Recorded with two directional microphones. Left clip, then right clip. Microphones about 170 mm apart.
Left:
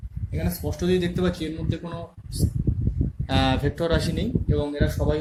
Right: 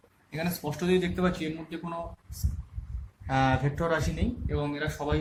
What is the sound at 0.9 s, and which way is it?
Speech, 40° left (ahead or behind).